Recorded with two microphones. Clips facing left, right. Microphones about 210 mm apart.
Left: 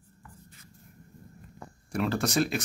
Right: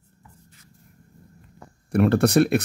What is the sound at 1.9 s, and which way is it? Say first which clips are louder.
Speech: right 10 dB; 60° right (ahead or behind).